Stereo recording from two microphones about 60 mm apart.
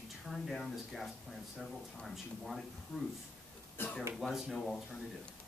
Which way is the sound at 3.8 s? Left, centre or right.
Left.